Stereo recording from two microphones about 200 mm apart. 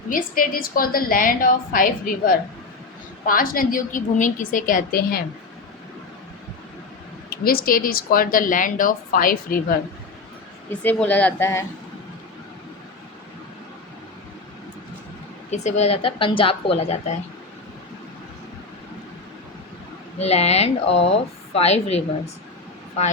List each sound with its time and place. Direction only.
0.1 s speech: 45° left (ahead or behind)
7.3 s speech: 50° left (ahead or behind)
10.7 s speech: 5° left (ahead or behind)
15.4 s speech: 35° left (ahead or behind)
20.1 s speech: 30° left (ahead or behind)